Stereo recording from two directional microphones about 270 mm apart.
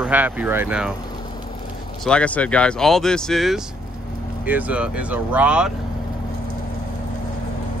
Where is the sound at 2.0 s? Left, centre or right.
Centre.